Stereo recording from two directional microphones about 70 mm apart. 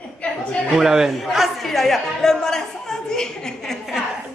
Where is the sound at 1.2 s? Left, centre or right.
Centre.